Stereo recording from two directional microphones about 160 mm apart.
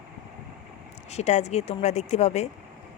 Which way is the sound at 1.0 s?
45° left (ahead or behind).